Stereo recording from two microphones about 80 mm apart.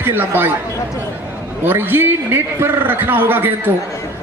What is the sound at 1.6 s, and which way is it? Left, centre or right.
A man's voice, right.